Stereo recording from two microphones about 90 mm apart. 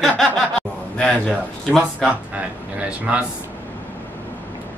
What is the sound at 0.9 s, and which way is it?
Speech, 10° left (ahead or behind).